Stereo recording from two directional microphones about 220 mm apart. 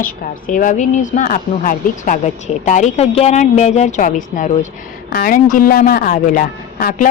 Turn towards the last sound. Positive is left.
turn(degrees=40)  # may be behind; listen again after turning